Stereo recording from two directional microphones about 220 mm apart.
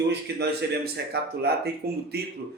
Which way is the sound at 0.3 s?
50° right (ahead or behind).